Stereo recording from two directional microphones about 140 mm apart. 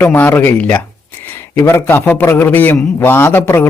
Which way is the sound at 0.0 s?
10° left (ahead or behind).